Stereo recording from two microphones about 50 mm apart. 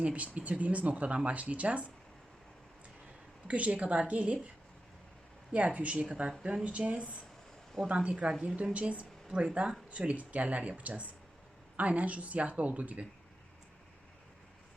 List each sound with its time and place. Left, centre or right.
0.0 s speech: right
3.4 s speech: right
5.5 s speech: right